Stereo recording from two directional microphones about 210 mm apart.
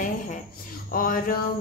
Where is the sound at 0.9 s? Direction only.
40° left (ahead or behind).